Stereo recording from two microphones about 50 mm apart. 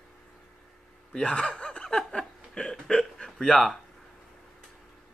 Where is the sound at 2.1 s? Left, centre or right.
Centre.